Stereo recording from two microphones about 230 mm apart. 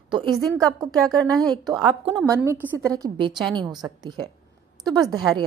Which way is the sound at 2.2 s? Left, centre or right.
Centre.